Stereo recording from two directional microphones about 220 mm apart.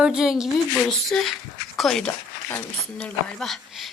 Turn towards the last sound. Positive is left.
turn(degrees=0)  # may be behind; listen again after turning